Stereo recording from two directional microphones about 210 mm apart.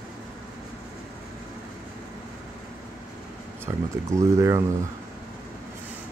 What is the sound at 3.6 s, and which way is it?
Speech, 15° right (ahead or behind).